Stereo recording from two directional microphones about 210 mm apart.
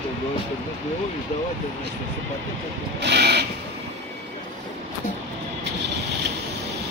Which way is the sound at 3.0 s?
55° right (ahead or behind).